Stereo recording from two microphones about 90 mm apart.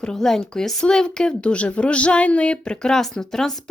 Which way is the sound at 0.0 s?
5° left (ahead or behind).